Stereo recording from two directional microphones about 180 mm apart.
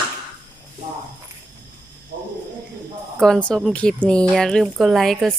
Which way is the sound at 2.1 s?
50° right (ahead or behind).